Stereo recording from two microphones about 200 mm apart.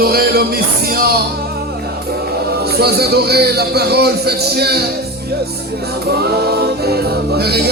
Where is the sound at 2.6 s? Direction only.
50° right (ahead or behind).